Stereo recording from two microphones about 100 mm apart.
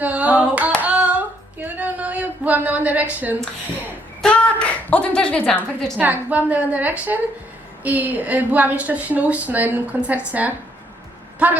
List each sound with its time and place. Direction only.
0.0 s hands: 15° right (ahead or behind)
1.6 s a sound: 15° right (ahead or behind)
4.2 s speech: 10° left (ahead or behind)
6.0 s a woman's voice: 15° right (ahead or behind)